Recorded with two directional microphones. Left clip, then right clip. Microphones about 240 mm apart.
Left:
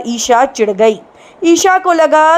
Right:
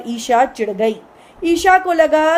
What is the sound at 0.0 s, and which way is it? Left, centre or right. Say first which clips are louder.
A woman's voice: left 4 dB; centre.